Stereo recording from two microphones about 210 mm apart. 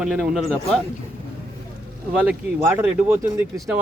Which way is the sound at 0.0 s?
5° right (ahead or behind).